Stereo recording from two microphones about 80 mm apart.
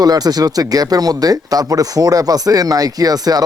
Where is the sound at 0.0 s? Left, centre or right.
Right.